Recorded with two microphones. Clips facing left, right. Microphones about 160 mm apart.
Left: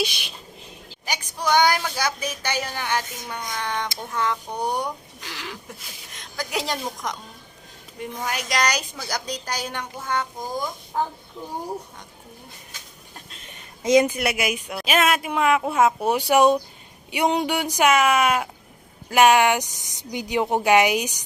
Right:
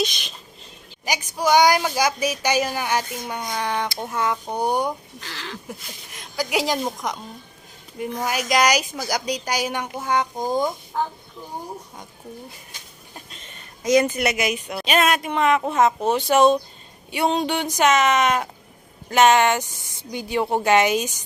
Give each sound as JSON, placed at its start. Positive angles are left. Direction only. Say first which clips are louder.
{"t": 0.0, "sound": "a woman's voice", "louder": "right 2 dB", "side_deg": 10}
{"t": 1.0, "sound": "a woman's voice", "louder": "right 4 dB", "side_deg": -10}
{"t": 4.4, "sound": "speech", "louder": "right 4 dB", "side_deg": -30}
{"t": 5.2, "sound": "a woman's voice", "louder": "left 2 dB", "side_deg": 15}
{"t": 6.1, "sound": "a woman's voice", "louder": "right 5 dB", "side_deg": -5}
{"t": 13.8, "sound": "speech", "louder": "left 1 dB", "side_deg": 25}
{"t": 14.2, "sound": "a woman's voice", "louder": "right 2 dB", "side_deg": 5}